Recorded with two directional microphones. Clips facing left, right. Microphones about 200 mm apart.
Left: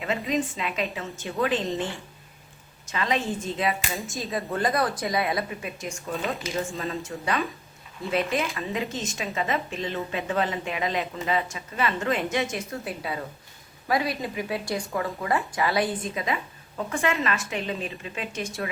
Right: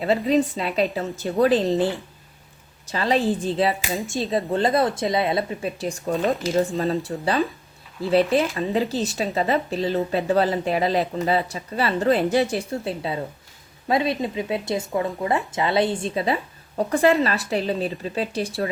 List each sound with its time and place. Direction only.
0.0 s speech: 35° right (ahead or behind)
3.8 s speech: centre (ahead or behind)
4.4 s speech: 25° right (ahead or behind)
6.1 s speech: centre (ahead or behind)
6.7 s speech: 35° right (ahead or behind)